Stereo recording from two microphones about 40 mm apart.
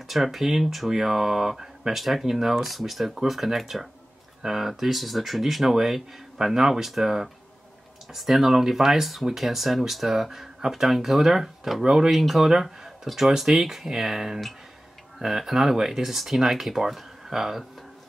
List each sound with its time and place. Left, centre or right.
0.1 s speech: centre
11.8 s speech: centre
12.1 s speech: centre